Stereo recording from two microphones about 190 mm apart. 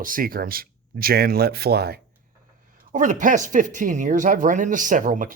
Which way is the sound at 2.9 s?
40° right (ahead or behind).